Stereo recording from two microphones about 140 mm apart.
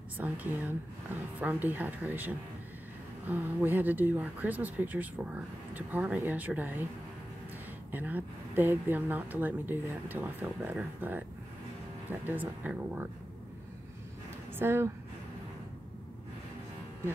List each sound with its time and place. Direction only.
0.2 s speech: 10° right (ahead or behind)
7.9 s speech: 10° right (ahead or behind)
14.6 s speech: 15° right (ahead or behind)